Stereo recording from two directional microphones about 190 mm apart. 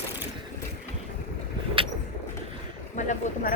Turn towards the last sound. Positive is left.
turn(degrees=40)  # may be behind; listen again after turning